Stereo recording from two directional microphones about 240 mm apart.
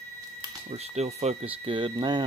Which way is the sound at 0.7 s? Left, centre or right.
Right.